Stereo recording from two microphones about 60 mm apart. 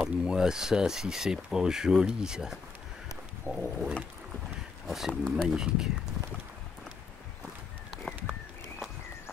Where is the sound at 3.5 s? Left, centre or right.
Left.